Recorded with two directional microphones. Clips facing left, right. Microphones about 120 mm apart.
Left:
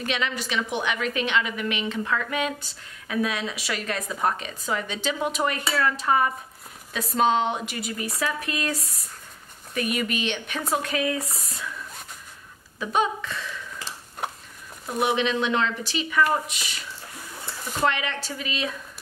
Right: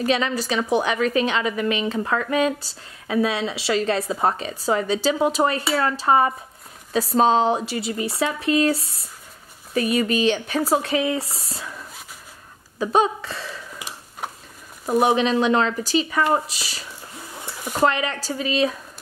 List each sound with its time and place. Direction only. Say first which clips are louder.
0.0 s a woman's voice: right 7 dB; 35° right (ahead or behind)
12.7 s a woman's voice: right 5 dB; 35° right (ahead or behind)
14.2 s a sound: left 1 dB; centre (ahead or behind)
14.9 s a woman's voice: right 6 dB; 40° right (ahead or behind)